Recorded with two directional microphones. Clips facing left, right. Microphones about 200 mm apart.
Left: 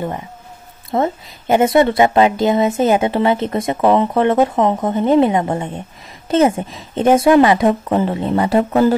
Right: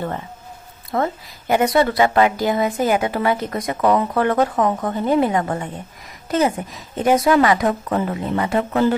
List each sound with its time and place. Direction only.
0.9 s a woman's voice: 25° left (ahead or behind)